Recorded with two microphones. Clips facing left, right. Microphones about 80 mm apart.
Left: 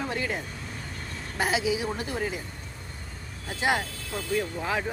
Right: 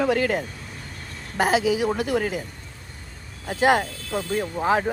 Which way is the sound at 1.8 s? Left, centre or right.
Right.